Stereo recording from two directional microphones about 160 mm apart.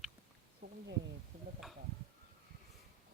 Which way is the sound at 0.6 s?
50° right (ahead or behind).